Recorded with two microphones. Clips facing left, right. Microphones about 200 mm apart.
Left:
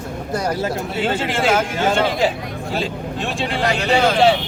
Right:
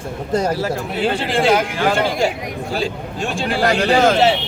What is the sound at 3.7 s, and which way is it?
Speech, 45° right (ahead or behind).